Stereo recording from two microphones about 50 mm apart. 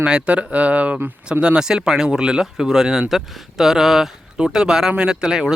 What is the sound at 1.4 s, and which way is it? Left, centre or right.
Speech, centre.